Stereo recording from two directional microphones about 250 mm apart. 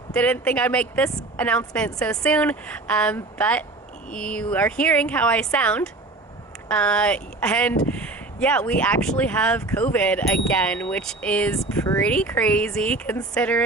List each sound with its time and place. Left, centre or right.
0.1 s speech: centre